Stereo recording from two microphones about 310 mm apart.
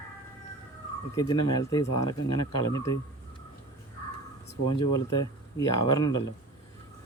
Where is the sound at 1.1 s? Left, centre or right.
Centre.